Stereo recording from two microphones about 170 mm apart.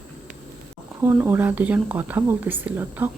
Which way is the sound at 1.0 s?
15° right (ahead or behind).